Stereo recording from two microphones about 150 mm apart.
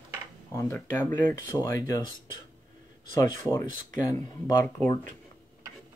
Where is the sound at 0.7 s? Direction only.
15° left (ahead or behind).